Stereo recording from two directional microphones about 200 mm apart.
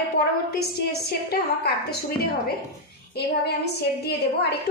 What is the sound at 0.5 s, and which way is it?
A woman's voice, 50° left (ahead or behind).